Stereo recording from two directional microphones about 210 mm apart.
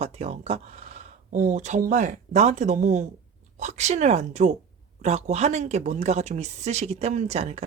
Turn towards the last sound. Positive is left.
turn(degrees=-30)  # may be behind; listen again after turning